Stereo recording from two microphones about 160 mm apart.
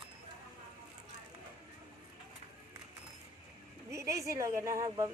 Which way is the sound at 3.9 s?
20° right (ahead or behind).